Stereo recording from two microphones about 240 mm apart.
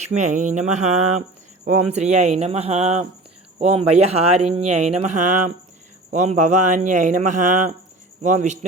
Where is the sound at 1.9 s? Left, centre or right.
Right.